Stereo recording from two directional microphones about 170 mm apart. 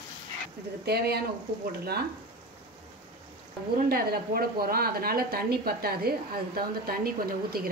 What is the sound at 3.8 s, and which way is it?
A woman's voice, 65° right (ahead or behind).